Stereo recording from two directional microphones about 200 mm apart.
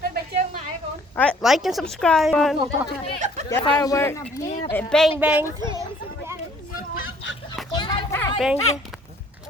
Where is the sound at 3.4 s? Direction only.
20° left (ahead or behind).